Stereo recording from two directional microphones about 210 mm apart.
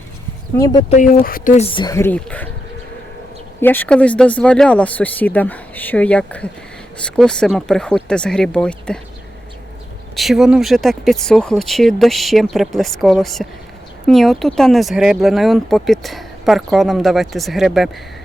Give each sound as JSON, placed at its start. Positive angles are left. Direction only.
{"t": 0.5, "sound": "speech", "side_deg": 20}
{"t": 0.9, "sound": "speech", "side_deg": 40}
{"t": 3.6, "sound": "speech", "side_deg": 10}
{"t": 10.2, "sound": "speech", "side_deg": 0}